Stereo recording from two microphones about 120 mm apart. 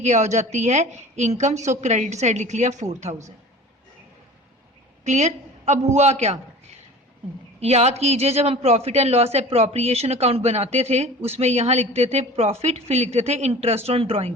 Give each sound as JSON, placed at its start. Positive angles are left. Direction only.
{"t": 0.0, "sound": "a woman's voice", "side_deg": -75}
{"t": 5.0, "sound": "a man's voice", "side_deg": -75}